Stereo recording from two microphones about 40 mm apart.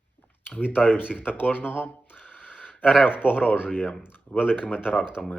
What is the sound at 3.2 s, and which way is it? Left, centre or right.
Speech, left.